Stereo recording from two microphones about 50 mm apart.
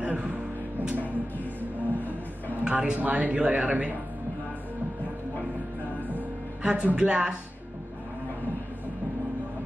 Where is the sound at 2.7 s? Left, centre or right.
Right.